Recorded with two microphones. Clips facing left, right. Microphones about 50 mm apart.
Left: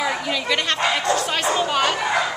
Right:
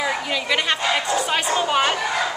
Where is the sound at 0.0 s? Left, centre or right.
Centre.